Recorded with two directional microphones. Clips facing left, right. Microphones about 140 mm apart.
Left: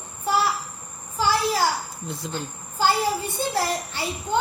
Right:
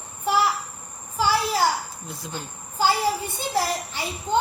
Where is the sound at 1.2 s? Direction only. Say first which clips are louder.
Even; 10° right (ahead or behind).